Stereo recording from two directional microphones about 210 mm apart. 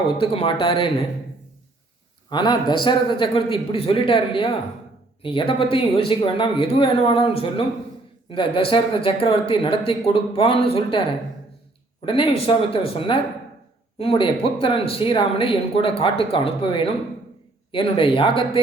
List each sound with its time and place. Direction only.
0.2 s speech: 25° left (ahead or behind)
2.3 s speech: 20° left (ahead or behind)
12.0 s speech: 25° left (ahead or behind)